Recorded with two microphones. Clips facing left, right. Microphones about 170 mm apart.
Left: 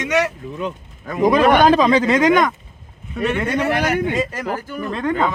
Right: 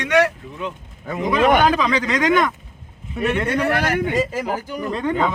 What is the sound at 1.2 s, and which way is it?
Speech, 35° left (ahead or behind).